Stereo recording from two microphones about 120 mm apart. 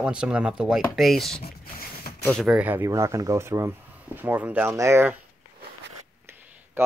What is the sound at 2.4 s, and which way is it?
Speech, 10° right (ahead or behind).